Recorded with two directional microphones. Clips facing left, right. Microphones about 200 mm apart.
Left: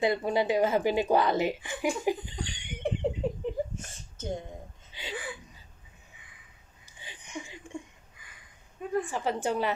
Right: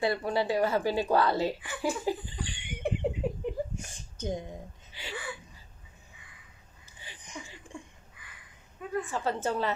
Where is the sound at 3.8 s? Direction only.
15° right (ahead or behind).